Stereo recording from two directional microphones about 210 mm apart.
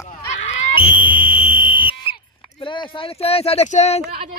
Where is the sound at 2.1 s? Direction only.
25° left (ahead or behind).